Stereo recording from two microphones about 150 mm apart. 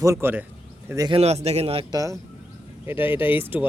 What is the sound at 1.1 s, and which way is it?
Speech, 45° right (ahead or behind).